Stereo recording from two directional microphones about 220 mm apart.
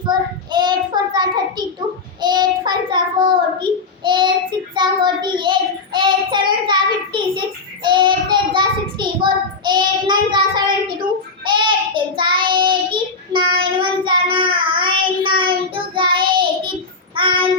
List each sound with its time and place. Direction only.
0.0 s child singing: 20° right (ahead or behind)